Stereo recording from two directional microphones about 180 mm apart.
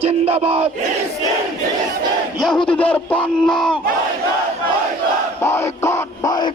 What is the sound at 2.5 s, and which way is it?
Speech, 30° left (ahead or behind).